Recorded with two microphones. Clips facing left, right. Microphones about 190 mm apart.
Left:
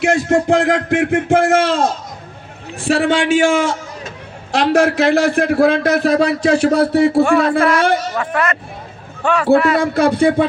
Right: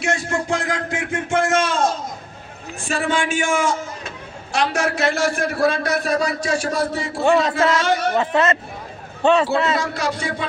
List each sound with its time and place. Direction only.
0.0 s a man's voice: 60° left (ahead or behind)
2.9 s a man's voice: 65° left (ahead or behind)
4.7 s a man's voice: 60° left (ahead or behind)
7.2 s a man's voice: 20° right (ahead or behind)
7.7 s a man's voice: 55° left (ahead or behind)
8.2 s a man's voice: 25° right (ahead or behind)
9.8 s a man's voice: 55° left (ahead or behind)